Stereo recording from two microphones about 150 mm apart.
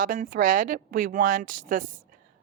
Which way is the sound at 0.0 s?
65° right (ahead or behind).